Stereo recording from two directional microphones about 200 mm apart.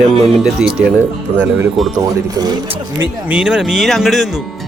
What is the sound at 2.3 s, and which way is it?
Speech, 20° right (ahead or behind).